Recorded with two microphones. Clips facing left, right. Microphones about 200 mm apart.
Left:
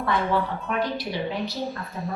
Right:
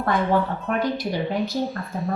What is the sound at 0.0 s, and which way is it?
A woman's voice, 45° right (ahead or behind).